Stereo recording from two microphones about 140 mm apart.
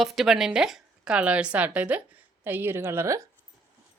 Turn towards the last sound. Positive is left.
turn(degrees=-20)  # may be behind; listen again after turning